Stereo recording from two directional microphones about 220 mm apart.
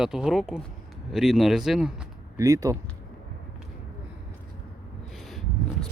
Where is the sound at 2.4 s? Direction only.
15° right (ahead or behind).